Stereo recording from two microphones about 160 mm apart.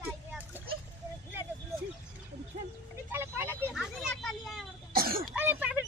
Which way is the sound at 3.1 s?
15° right (ahead or behind).